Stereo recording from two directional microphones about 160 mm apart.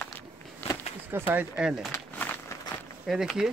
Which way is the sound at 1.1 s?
10° right (ahead or behind).